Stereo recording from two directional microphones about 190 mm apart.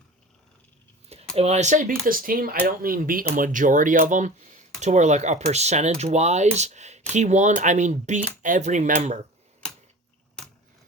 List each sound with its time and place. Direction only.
1.4 s speech: 35° right (ahead or behind)